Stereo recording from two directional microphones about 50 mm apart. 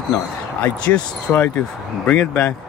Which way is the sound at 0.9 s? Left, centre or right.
Left.